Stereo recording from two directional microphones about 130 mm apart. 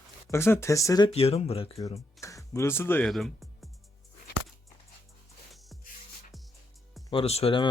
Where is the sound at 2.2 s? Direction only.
25° left (ahead or behind).